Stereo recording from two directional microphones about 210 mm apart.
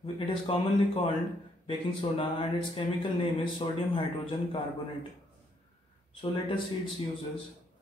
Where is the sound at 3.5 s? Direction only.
25° left (ahead or behind).